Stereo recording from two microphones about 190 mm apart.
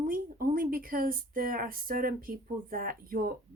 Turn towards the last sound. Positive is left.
turn(degrees=-45)  # may be behind; listen again after turning